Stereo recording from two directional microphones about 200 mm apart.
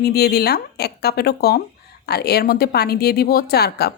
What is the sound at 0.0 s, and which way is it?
A woman's voice, 50° left (ahead or behind).